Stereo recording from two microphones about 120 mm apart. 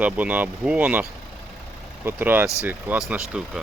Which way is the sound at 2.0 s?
15° right (ahead or behind).